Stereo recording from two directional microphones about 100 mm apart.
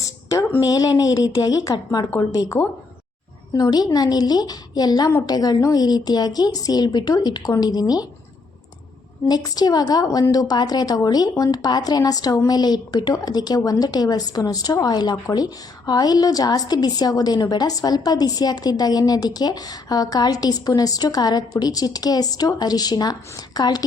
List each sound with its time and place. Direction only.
0.0 s a sound: 35° left (ahead or behind)
0.7 s a woman's voice: 40° left (ahead or behind)
2.3 s speech: 30° left (ahead or behind)
3.5 s a woman's voice: 40° left (ahead or behind)
9.2 s a woman's voice: 40° left (ahead or behind)